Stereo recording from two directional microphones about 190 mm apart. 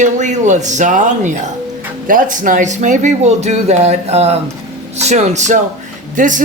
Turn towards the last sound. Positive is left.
turn(degrees=-40)  # may be behind; listen again after turning